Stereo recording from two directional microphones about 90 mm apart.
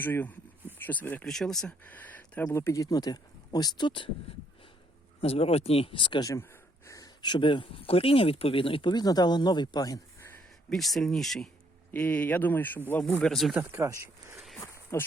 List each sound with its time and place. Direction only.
0.0 s speech: 20° left (ahead or behind)
1.2 s speech: 5° left (ahead or behind)
1.8 s a sound: 20° left (ahead or behind)
2.5 s speech: 30° left (ahead or behind); by 4.1 s 65° left (ahead or behind)
5.2 s speech: 90° left; by 6.2 s 65° left (ahead or behind)
6.5 s a sound: 35° left (ahead or behind)
7.2 s speech: 60° left (ahead or behind); by 8.9 s 85° left
8.9 s speech: 50° left (ahead or behind)
10.7 s speech: centre (ahead or behind)
11.9 s speech: 15° left (ahead or behind)
13.0 s speech: 5° left (ahead or behind)
13.6 s speech: 25° right (ahead or behind)
14.3 s a sound: centre (ahead or behind)
14.6 s a sound: 30° left (ahead or behind)